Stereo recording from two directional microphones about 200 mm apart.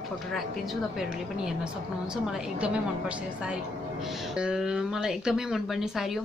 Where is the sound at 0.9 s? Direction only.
5° right (ahead or behind).